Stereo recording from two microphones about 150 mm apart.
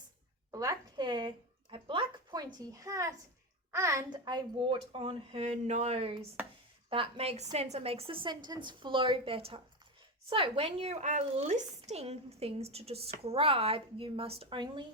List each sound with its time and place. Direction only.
0.5 s a woman's voice: 20° right (ahead or behind)